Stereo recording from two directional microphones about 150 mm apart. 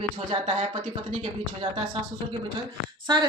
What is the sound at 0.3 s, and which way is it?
Speech, 40° right (ahead or behind).